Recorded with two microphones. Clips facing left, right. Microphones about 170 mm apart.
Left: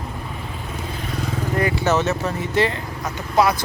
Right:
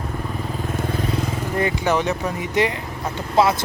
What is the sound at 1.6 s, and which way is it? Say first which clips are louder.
Speech: left 1 dB; 15° right (ahead or behind).